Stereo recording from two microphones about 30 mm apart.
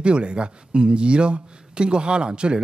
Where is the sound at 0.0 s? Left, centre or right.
Right.